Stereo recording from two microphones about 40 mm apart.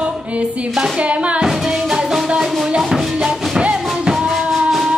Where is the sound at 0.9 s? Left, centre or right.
Right.